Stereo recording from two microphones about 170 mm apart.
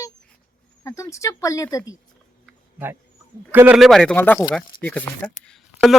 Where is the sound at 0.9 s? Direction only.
20° left (ahead or behind).